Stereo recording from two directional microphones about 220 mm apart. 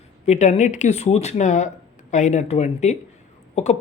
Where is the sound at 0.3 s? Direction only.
30° left (ahead or behind).